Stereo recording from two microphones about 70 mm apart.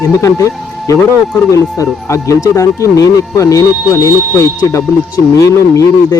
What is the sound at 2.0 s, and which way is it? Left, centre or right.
Speech, left.